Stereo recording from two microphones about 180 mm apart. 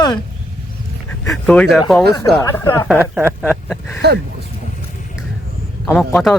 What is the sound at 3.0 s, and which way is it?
Speech, 10° right (ahead or behind).